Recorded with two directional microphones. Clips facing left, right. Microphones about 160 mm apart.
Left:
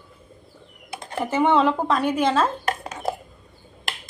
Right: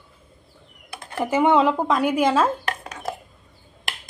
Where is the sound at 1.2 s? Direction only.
10° right (ahead or behind).